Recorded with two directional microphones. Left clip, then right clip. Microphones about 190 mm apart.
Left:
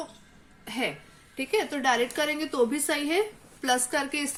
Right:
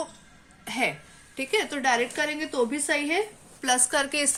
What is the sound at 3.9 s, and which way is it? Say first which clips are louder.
Speech: right 3 dB; 15° right (ahead or behind).